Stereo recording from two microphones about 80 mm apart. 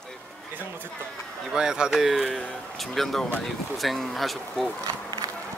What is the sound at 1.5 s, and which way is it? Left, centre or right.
Speech, centre.